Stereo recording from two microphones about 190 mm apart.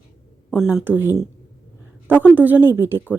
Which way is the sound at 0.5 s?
5° right (ahead or behind).